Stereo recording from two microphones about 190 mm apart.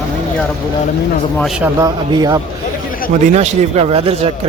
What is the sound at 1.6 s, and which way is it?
Speech, 20° right (ahead or behind).